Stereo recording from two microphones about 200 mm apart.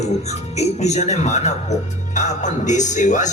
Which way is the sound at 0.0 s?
35° left (ahead or behind).